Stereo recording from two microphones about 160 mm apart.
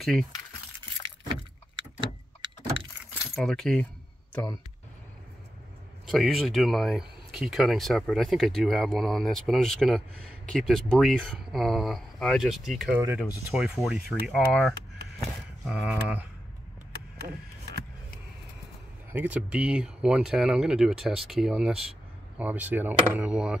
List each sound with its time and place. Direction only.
0.0 s speech: centre (ahead or behind)
1.3 s vehicle: 30° right (ahead or behind)
3.3 s speech: centre (ahead or behind)
6.0 s speech: centre (ahead or behind)
12.9 s speech: 15° right (ahead or behind)
19.1 s speech: 10° right (ahead or behind)